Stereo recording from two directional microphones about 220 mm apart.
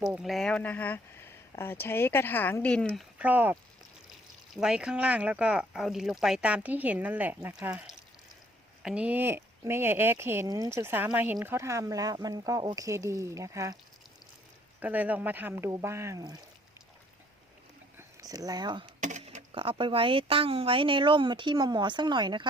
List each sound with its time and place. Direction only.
0.0 s speech: centre (ahead or behind)
14.8 s speech: 5° right (ahead or behind)
17.9 s a sound: 15° right (ahead or behind)
18.9 s speech: 35° right (ahead or behind)